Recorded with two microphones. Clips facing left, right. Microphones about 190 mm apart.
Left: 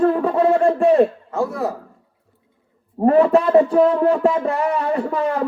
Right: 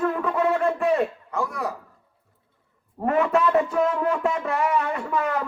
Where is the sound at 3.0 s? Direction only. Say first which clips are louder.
Left 7 dB; 35° left (ahead or behind).